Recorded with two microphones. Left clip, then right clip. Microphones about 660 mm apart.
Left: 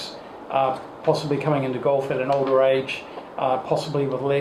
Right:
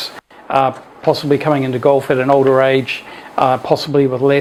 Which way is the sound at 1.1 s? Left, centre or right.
Right.